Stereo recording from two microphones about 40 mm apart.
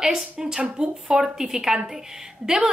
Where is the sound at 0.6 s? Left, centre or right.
Right.